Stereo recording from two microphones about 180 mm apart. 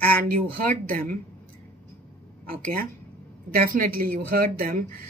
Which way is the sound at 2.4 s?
55° right (ahead or behind).